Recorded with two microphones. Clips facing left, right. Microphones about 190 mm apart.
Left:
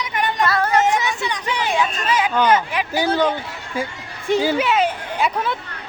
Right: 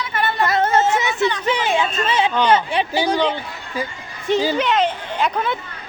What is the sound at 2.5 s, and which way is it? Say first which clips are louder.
Speech: right 1 dB; 30° right (ahead or behind).